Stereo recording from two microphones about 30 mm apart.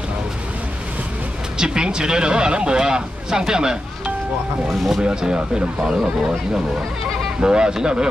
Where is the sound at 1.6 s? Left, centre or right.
Right.